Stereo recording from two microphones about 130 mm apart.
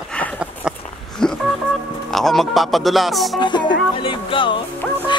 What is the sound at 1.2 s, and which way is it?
Telephone dialing, 5° left (ahead or behind).